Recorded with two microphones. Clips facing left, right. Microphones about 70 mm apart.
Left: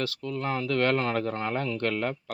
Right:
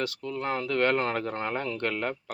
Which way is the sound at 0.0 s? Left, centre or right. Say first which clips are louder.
Even; centre.